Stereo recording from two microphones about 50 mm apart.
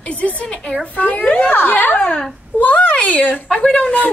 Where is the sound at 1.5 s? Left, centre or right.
Left.